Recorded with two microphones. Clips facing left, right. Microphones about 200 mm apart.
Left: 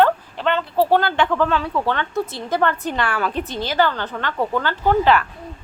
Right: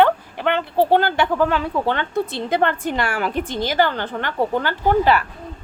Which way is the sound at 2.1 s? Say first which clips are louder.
Right 2 dB; 60° right (ahead or behind).